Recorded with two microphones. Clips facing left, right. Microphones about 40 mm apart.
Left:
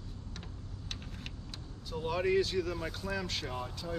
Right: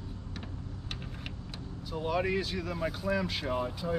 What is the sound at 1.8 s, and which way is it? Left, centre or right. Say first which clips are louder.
Speech: right 1 dB; centre.